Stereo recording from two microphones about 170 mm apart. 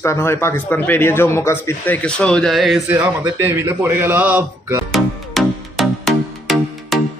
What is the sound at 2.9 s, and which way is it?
A man's voice, 10° right (ahead or behind).